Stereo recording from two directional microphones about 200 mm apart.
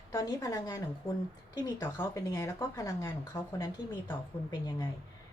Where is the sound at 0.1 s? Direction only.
15° left (ahead or behind).